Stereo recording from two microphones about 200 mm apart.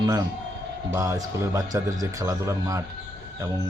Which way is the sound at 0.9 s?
15° right (ahead or behind).